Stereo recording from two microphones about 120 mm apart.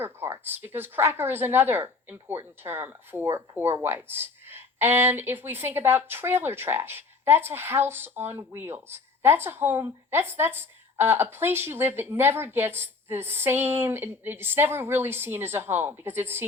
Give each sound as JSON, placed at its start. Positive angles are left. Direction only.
{"t": 0.0, "sound": "speech", "side_deg": -20}